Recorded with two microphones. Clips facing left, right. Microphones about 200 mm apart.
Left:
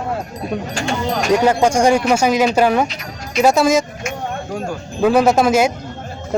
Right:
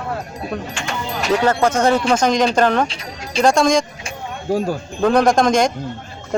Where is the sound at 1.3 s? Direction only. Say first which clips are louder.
Left 2 dB; 15° left (ahead or behind).